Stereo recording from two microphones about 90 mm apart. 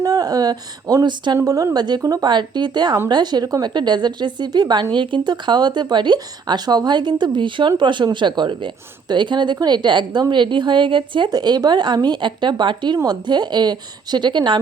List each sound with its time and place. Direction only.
0.0 s speech: 45° right (ahead or behind)
1.5 s speech: 40° right (ahead or behind)
2.3 s speech: 55° right (ahead or behind)
11.3 s speech: 50° right (ahead or behind)